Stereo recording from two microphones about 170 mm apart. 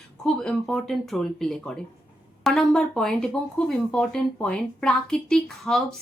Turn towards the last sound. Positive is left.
turn(degrees=5)  # may be behind; listen again after turning